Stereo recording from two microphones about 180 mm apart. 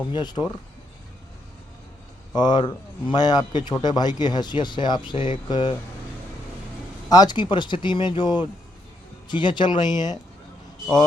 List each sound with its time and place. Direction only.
0.1 s speech: 25° left (ahead or behind)
2.3 s speech: 25° left (ahead or behind)
7.1 s speech: 25° left (ahead or behind)